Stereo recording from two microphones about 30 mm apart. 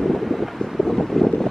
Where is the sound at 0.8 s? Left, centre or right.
Centre.